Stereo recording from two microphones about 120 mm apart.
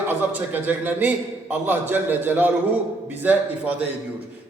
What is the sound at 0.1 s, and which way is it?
A man's voice, 15° right (ahead or behind).